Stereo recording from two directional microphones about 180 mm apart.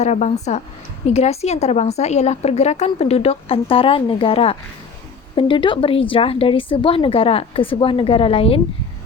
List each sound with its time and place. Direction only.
0.0 s a woman's voice: 40° left (ahead or behind)